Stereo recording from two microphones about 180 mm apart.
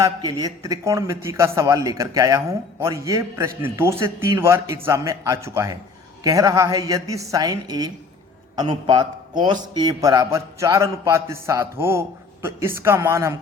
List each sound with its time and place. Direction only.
0.0 s a man's voice: 25° right (ahead or behind)